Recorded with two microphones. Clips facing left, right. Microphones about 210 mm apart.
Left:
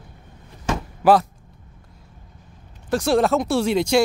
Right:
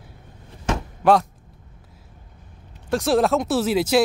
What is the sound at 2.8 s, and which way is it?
Speech, centre (ahead or behind).